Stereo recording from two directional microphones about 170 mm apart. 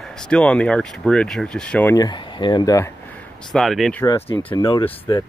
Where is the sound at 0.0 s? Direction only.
5° left (ahead or behind).